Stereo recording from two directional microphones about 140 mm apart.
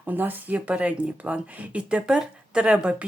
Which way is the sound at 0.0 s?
15° right (ahead or behind).